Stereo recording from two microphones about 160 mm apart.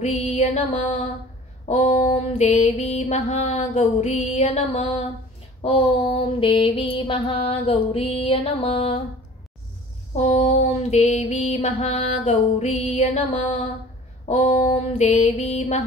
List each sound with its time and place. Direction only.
0.0 s mantra: 45° left (ahead or behind)
10.1 s mantra: 45° left (ahead or behind)